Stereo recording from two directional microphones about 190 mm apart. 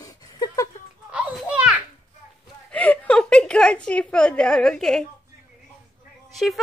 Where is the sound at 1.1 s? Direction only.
5° right (ahead or behind).